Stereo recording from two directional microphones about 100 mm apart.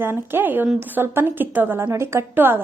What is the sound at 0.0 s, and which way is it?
A woman's voice, 20° right (ahead or behind).